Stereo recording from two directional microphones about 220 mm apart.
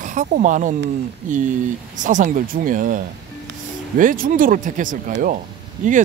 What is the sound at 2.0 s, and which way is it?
Speech, 35° right (ahead or behind).